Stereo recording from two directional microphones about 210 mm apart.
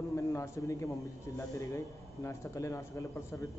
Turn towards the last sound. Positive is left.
turn(degrees=15)  # may be behind; listen again after turning